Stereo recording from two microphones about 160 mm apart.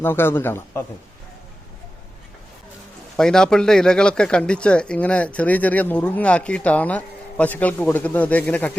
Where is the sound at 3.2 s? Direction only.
5° left (ahead or behind).